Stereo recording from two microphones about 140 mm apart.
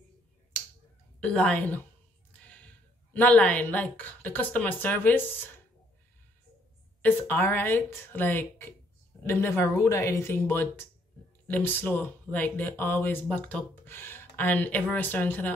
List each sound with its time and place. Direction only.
1.2 s speech: 10° left (ahead or behind)
2.3 s a sound: 10° left (ahead or behind)
3.1 s speech: 10° left (ahead or behind)
7.0 s speech: 10° left (ahead or behind)